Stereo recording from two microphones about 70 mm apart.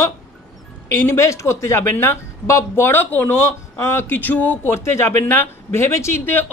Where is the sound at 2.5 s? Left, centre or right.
Left.